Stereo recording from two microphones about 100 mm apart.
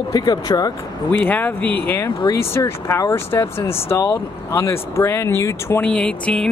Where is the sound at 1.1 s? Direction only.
15° left (ahead or behind).